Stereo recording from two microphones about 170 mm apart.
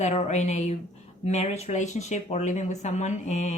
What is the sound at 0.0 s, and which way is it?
Speech, 40° left (ahead or behind).